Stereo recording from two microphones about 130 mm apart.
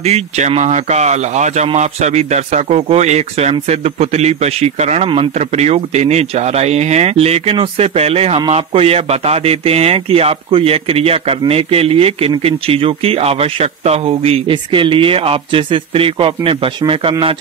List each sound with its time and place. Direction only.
0.0 s a man's voice: 55° right (ahead or behind)